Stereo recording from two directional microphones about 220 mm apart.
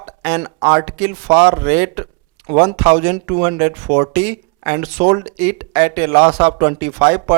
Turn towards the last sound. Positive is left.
turn(degrees=-20)  # may be behind; listen again after turning